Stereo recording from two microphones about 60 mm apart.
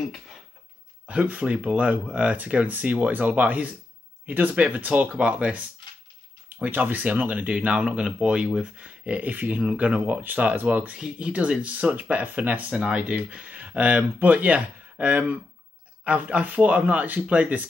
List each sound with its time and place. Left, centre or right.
1.0 s speech: right
6.6 s speech: right